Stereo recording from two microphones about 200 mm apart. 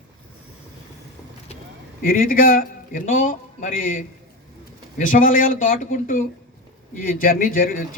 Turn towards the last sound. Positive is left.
turn(degrees=45)  # may be behind; listen again after turning